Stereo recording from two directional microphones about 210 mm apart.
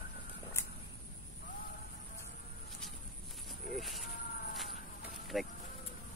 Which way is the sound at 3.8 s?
Centre (ahead or behind).